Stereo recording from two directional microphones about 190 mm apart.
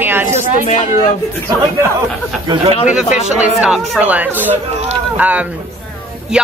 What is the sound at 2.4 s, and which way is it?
Speech, 25° right (ahead or behind).